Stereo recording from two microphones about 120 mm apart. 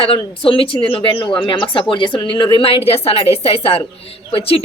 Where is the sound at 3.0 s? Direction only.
55° left (ahead or behind).